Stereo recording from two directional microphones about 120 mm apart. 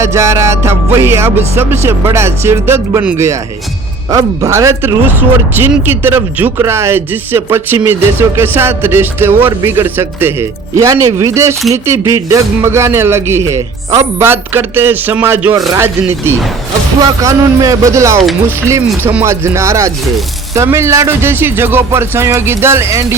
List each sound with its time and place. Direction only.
0.0 s music: 25° right (ahead or behind)
5.5 s a man's voice: 15° right (ahead or behind)
9.6 s music: 20° right (ahead or behind)
19.2 s music: 25° right (ahead or behind)